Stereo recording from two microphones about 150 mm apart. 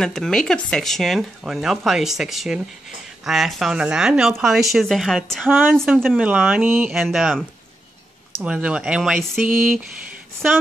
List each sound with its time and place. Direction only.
0.0 s speech: 5° left (ahead or behind)